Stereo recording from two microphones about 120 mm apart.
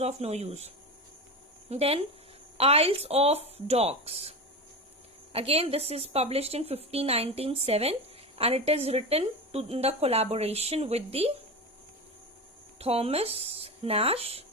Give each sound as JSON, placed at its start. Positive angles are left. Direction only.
{"t": 0.0, "sound": "speech", "side_deg": -65}
{"t": 1.7, "sound": "speech", "side_deg": -55}
{"t": 12.8, "sound": "speech", "side_deg": -55}